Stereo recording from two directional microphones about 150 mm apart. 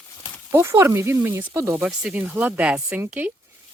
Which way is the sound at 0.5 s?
15° right (ahead or behind).